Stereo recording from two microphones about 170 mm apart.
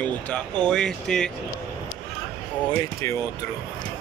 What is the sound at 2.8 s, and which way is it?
Speech, 20° left (ahead or behind).